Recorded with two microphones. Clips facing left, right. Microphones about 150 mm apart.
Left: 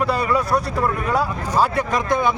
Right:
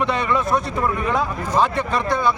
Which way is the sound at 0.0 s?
5° left (ahead or behind).